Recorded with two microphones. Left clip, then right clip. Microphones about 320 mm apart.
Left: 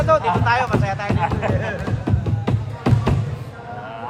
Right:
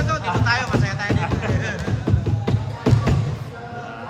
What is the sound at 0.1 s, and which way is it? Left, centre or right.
Music, centre.